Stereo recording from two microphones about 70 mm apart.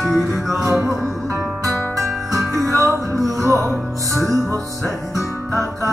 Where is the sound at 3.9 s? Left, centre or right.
Right.